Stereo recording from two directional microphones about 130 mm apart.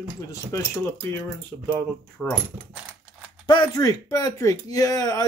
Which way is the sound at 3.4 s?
30° left (ahead or behind).